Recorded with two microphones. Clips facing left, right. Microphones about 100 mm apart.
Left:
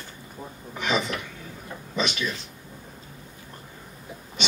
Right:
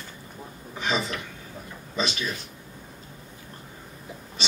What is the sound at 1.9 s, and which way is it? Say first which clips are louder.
Speech: left 1 dB; 35° right (ahead or behind).